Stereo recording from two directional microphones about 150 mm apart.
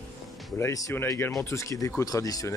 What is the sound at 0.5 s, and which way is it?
Speech, 20° left (ahead or behind).